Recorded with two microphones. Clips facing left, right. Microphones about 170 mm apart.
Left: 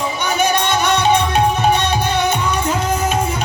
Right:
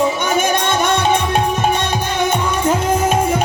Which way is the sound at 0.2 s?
50° right (ahead or behind).